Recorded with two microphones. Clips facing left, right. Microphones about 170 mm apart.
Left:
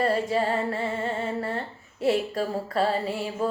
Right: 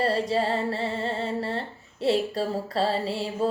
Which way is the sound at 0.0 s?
30° right (ahead or behind).